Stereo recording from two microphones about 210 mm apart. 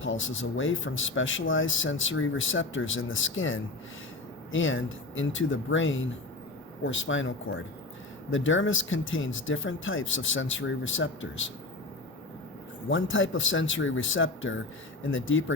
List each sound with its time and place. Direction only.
0.0 s speech: 65° left (ahead or behind)
12.9 s speech: 65° left (ahead or behind)